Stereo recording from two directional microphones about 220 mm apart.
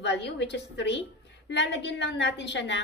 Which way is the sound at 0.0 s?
50° left (ahead or behind).